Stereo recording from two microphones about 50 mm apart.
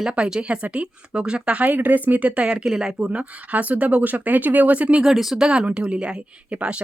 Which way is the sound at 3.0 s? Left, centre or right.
Right.